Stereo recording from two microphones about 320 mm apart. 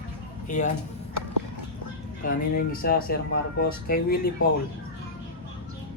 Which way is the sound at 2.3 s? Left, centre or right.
Left.